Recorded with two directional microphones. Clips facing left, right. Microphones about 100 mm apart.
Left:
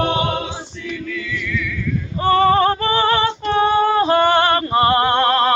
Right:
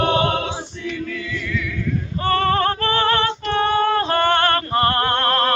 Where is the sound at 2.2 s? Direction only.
10° left (ahead or behind).